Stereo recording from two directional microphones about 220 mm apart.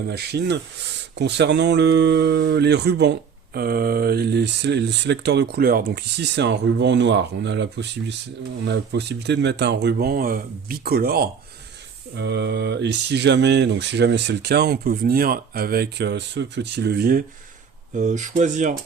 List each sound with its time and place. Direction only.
0.1 s speech: 50° right (ahead or behind)